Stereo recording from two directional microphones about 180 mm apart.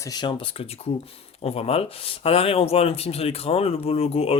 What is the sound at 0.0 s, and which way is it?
Speech, 25° left (ahead or behind).